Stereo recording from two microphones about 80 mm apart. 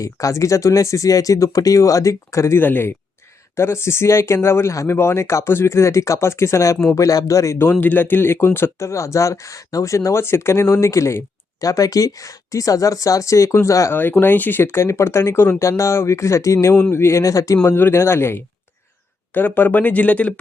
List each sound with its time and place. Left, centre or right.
0.0 s speech: left
7.7 s speech: left
13.9 s speech: left
17.7 s speech: left